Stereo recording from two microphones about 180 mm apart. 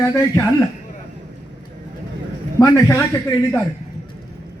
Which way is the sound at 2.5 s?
15° left (ahead or behind).